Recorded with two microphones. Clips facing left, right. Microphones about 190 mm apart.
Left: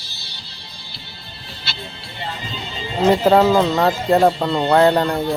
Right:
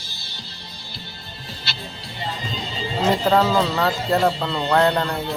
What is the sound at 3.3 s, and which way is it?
Speech, 35° left (ahead or behind).